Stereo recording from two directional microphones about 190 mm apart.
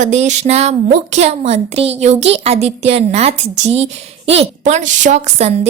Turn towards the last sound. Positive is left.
turn(degrees=-35)  # may be behind; listen again after turning